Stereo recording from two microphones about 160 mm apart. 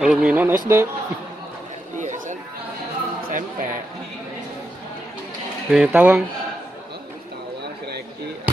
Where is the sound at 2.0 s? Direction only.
50° right (ahead or behind).